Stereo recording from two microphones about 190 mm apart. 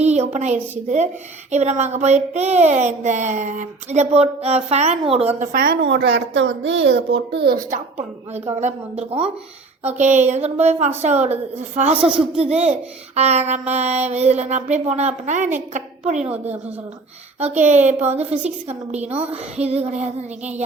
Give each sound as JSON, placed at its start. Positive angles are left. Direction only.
{"t": 0.0, "sound": "a woman's voice", "side_deg": -35}
{"t": 5.8, "sound": "a woman's voice", "side_deg": -65}
{"t": 8.3, "sound": "a woman's voice", "side_deg": -35}
{"t": 17.4, "sound": "a woman's voice", "side_deg": -35}